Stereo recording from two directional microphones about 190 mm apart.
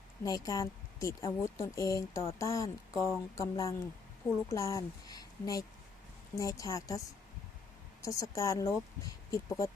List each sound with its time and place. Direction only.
0.3 s speech: 20° left (ahead or behind)
8.0 s speech: 15° left (ahead or behind)